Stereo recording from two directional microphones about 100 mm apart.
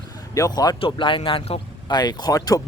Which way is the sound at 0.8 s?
60° left (ahead or behind).